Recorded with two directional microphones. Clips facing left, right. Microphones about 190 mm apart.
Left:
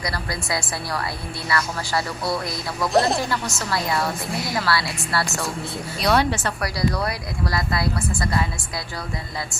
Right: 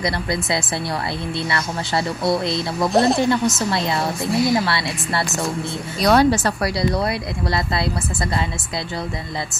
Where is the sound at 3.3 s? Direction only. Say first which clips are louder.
Right 7 dB; 20° right (ahead or behind).